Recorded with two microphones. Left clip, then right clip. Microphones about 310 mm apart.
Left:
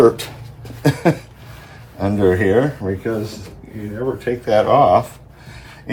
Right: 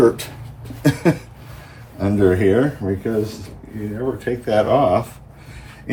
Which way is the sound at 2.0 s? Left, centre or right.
Centre.